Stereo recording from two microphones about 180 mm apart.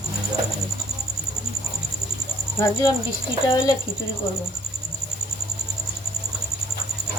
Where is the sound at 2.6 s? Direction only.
20° left (ahead or behind).